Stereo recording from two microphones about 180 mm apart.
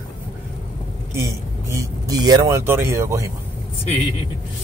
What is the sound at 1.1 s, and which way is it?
Speech, 15° right (ahead or behind).